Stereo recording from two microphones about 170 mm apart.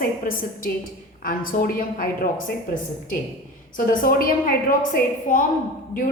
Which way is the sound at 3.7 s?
55° left (ahead or behind).